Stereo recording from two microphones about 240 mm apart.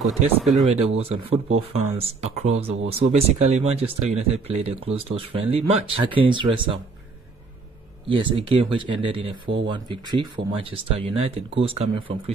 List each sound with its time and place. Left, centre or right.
0.4 s speech: centre
0.7 s speech: right
8.1 s speech: right
9.3 s speech: right
9.7 s speech: centre